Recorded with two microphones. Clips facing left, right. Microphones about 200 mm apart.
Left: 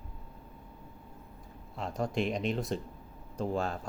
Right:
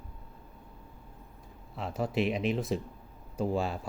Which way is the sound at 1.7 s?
5° right (ahead or behind).